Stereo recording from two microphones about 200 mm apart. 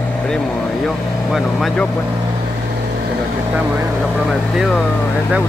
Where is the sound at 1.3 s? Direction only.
Centre (ahead or behind).